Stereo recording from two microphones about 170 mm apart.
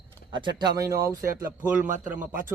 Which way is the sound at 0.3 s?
25° right (ahead or behind).